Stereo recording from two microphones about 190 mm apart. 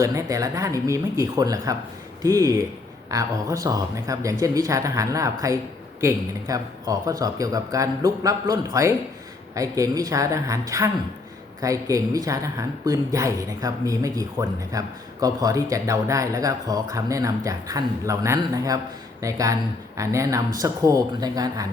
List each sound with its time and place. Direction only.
0.0 s a woman's voice: 15° right (ahead or behind)